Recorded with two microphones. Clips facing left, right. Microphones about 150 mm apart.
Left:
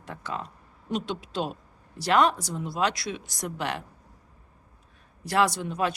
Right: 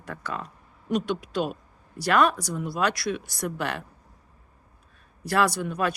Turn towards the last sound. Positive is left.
turn(degrees=25)  # may be behind; listen again after turning